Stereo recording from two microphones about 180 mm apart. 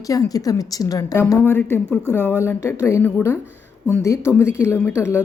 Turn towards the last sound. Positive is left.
turn(degrees=15)  # may be behind; listen again after turning